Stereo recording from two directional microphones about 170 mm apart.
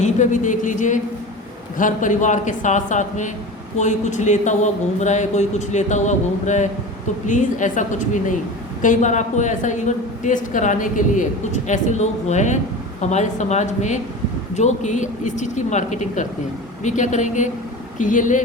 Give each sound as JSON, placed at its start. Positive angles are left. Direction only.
{"t": 0.0, "sound": "a woman's voice", "side_deg": 45}